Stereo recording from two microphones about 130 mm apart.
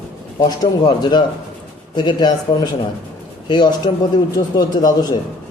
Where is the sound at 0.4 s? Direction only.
30° left (ahead or behind).